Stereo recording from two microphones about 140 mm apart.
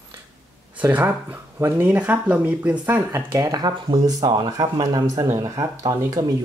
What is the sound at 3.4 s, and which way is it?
Speech, 30° right (ahead or behind).